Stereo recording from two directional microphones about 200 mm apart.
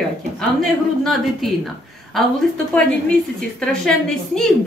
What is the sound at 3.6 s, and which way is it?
Speech, 5° left (ahead or behind).